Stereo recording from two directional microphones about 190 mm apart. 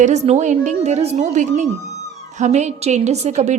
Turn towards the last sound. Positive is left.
turn(degrees=-35)  # may be behind; listen again after turning